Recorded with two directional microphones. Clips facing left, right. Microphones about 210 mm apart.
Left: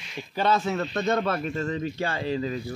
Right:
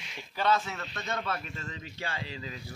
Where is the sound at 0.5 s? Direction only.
45° left (ahead or behind).